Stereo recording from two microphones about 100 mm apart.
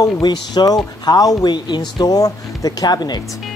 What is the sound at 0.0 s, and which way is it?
Speech, 45° left (ahead or behind).